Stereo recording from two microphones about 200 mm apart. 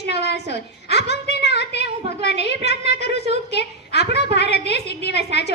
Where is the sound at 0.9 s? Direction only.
55° left (ahead or behind).